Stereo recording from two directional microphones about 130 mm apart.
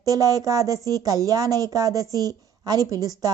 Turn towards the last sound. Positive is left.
turn(degrees=-30)  # may be behind; listen again after turning